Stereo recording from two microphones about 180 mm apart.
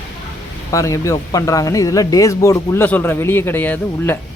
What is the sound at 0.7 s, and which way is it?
Speech, 15° left (ahead or behind).